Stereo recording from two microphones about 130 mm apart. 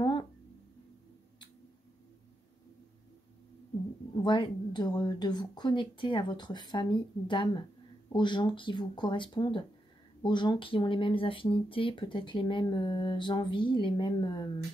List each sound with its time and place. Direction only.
4.2 s speech: 35° left (ahead or behind)